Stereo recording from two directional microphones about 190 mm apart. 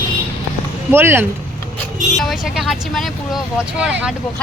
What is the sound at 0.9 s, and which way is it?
Speech, 10° right (ahead or behind).